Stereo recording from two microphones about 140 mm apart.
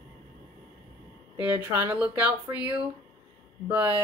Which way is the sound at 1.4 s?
15° right (ahead or behind).